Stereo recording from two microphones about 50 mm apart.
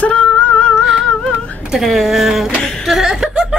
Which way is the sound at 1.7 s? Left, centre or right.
Centre.